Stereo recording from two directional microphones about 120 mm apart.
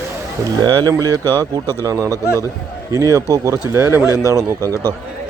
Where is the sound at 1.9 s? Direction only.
25° right (ahead or behind).